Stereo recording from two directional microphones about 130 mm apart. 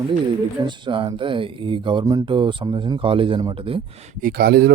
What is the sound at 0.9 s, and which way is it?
Speech, 40° right (ahead or behind).